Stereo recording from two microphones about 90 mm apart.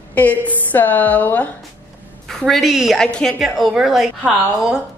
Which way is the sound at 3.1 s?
10° left (ahead or behind).